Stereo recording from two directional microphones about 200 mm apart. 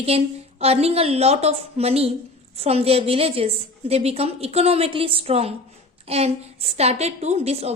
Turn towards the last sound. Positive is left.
turn(degrees=-30)  # may be behind; listen again after turning